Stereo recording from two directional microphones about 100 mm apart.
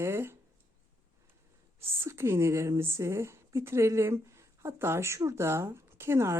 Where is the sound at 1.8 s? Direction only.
25° right (ahead or behind).